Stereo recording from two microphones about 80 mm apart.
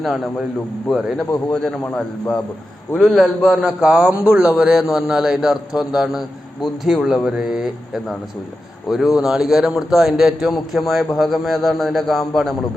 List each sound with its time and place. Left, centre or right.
0.0 s a man's voice: centre
2.9 s a man's voice: centre
9.1 s a man's voice: centre